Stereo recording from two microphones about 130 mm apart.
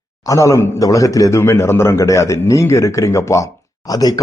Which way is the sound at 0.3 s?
25° left (ahead or behind).